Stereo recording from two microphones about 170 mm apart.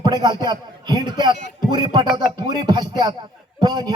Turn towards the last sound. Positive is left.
turn(degrees=-25)  # may be behind; listen again after turning